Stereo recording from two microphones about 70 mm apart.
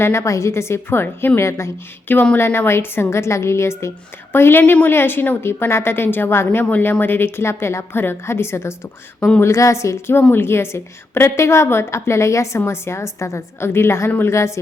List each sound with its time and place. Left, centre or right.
0.0 s a woman's voice: left